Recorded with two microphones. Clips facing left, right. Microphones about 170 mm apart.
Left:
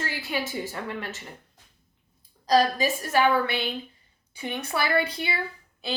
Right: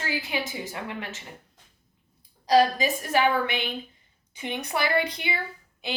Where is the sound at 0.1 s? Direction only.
15° right (ahead or behind).